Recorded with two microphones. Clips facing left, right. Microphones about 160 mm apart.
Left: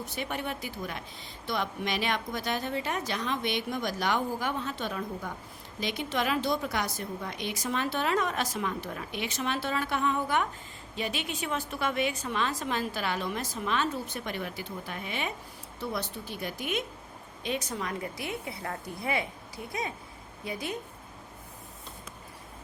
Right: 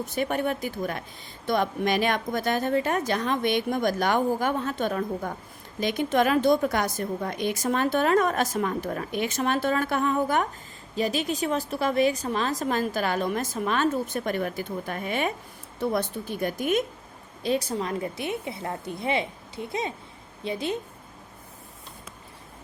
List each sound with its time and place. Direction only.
0.0 s a woman's voice: 50° right (ahead or behind)
17.4 s a woman's voice: 35° right (ahead or behind)